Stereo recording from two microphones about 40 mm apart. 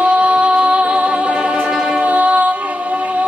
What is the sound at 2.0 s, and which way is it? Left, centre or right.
Music, right.